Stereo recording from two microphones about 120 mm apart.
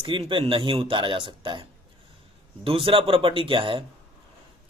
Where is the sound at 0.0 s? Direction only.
45° right (ahead or behind).